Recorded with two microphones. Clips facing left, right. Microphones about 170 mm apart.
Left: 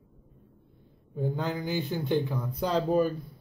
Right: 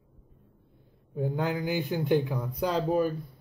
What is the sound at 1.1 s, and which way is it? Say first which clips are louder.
Speech: right 1 dB; 10° right (ahead or behind).